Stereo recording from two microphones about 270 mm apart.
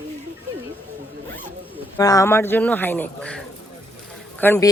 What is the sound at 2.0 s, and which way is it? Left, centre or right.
Speech, centre.